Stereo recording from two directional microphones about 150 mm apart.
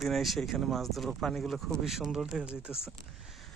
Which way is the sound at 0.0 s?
Centre (ahead or behind).